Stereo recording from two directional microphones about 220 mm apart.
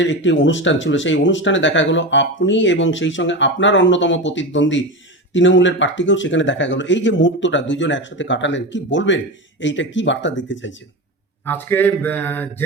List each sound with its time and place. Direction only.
0.0 s speech: 55° left (ahead or behind)
11.4 s speech: 10° left (ahead or behind)